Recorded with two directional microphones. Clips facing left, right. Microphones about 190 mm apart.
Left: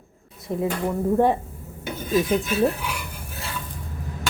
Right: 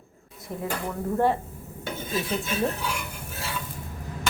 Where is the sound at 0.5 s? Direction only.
40° left (ahead or behind).